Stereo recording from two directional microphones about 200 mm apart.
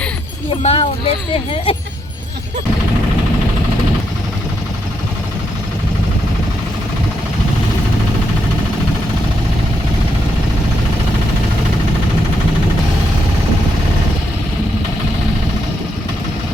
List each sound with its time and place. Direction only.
0.6 s speech: 30° left (ahead or behind)